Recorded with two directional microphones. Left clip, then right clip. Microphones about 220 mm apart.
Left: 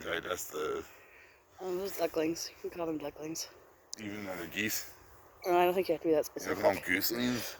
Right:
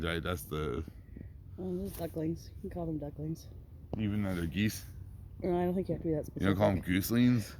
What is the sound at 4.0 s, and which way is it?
Speech, 15° left (ahead or behind).